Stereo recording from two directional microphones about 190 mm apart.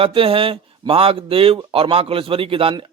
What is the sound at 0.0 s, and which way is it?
A man's voice, 30° right (ahead or behind).